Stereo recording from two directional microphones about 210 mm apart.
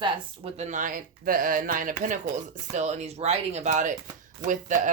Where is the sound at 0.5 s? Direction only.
35° right (ahead or behind).